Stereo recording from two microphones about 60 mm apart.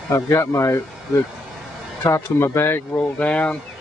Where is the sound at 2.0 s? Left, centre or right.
Left.